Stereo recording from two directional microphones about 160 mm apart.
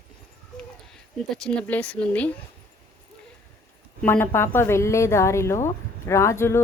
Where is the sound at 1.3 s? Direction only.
5° left (ahead or behind).